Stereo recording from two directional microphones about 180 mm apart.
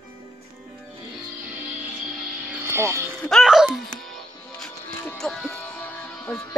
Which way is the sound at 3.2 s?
Centre (ahead or behind).